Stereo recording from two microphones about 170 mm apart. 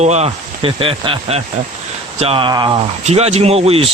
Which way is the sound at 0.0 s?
40° right (ahead or behind).